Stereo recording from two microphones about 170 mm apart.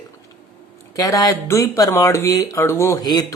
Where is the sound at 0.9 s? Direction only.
20° left (ahead or behind).